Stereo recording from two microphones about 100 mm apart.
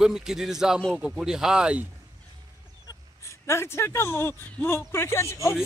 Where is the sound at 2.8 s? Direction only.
30° left (ahead or behind).